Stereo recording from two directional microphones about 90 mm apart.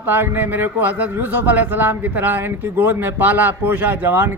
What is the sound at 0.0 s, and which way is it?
Speech, 20° right (ahead or behind).